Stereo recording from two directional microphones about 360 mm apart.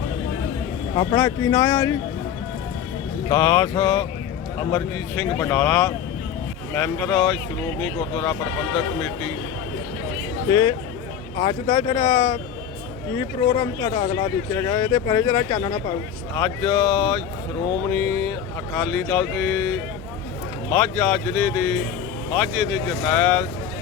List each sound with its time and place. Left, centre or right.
0.9 s speech: centre
3.2 s speech: centre
10.5 s speech: centre
20.7 s speech: centre